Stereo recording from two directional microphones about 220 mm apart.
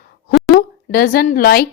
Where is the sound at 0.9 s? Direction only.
45° left (ahead or behind).